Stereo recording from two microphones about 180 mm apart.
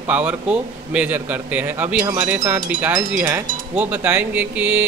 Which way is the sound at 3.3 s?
10° right (ahead or behind).